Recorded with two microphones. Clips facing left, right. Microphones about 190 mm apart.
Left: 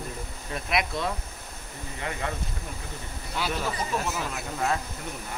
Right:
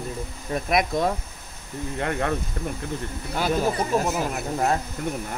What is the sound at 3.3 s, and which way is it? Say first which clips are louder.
Speech: right 7 dB; 45° right (ahead or behind).